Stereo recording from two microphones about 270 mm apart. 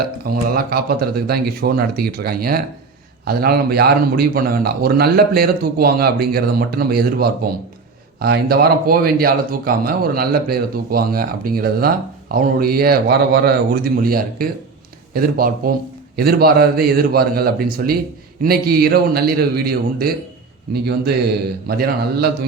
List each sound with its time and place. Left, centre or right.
0.3 s speech: right
21.7 s speech: right